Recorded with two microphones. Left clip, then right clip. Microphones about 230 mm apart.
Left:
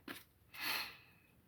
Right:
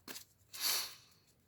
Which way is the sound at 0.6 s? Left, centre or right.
Right.